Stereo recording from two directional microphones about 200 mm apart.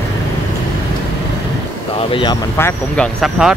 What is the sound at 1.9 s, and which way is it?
Vehicle, 25° left (ahead or behind).